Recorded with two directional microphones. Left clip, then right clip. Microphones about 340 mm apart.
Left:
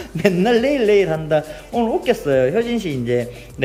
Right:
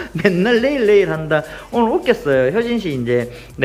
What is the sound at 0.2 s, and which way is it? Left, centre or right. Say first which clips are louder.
A woman's voice: right 1 dB; centre.